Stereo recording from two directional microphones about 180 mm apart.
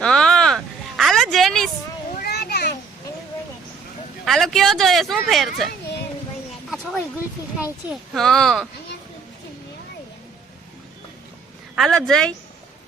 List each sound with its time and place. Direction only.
0.0 s a sound: 5° left (ahead or behind)
2.2 s children playing: 65° left (ahead or behind)
4.3 s speech: centre (ahead or behind)
6.7 s a sound: centre (ahead or behind)
8.1 s speech: centre (ahead or behind)
11.8 s speech: 5° left (ahead or behind)